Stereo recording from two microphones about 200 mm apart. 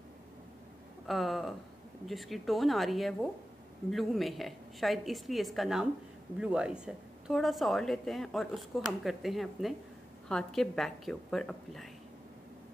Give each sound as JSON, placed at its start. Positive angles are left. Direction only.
{"t": 1.0, "sound": "a woman's voice", "side_deg": 0}